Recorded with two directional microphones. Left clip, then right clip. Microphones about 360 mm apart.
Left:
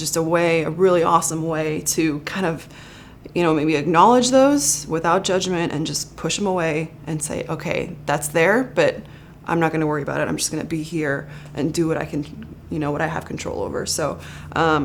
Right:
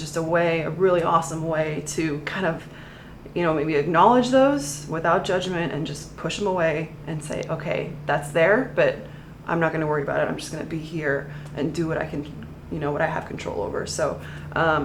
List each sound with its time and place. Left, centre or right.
0.0 s speech: left